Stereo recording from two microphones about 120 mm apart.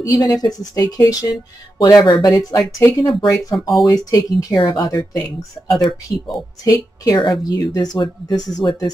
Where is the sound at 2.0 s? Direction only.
45° left (ahead or behind).